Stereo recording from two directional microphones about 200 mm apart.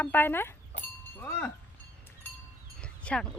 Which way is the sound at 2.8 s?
5° left (ahead or behind).